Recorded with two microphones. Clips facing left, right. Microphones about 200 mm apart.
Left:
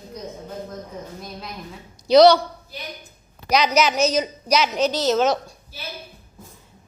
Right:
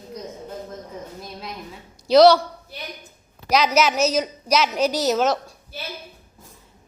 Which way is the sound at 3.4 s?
5° right (ahead or behind).